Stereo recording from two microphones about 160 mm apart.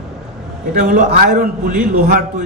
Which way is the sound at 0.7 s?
60° right (ahead or behind).